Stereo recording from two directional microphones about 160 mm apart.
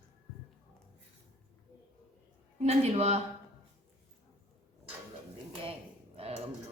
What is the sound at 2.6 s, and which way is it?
Speech, 40° right (ahead or behind).